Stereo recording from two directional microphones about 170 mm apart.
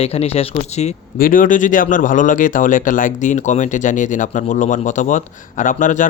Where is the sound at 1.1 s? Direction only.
55° left (ahead or behind).